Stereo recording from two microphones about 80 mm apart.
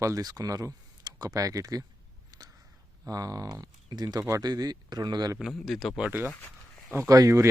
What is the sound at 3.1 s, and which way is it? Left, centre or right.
Speech, right.